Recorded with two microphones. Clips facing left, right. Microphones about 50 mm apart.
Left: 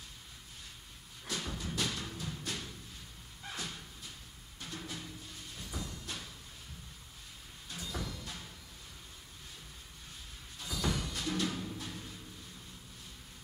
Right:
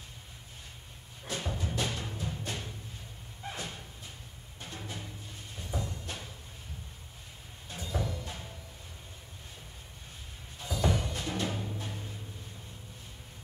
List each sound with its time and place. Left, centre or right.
1.2 s music: centre
3.4 s slam: centre
4.6 s music: centre
7.7 s music: centre
10.6 s music: centre